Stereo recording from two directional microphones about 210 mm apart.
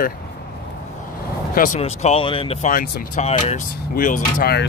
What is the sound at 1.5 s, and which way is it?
Speech, 40° left (ahead or behind).